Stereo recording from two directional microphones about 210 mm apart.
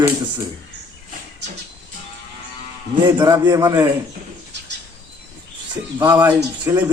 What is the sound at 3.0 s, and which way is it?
Speech, 20° right (ahead or behind).